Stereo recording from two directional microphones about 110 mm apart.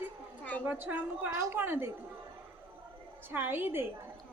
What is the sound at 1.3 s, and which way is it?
Speech, 25° right (ahead or behind).